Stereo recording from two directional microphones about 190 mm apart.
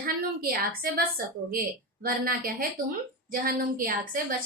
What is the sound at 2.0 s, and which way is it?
A woman's voice, 50° right (ahead or behind).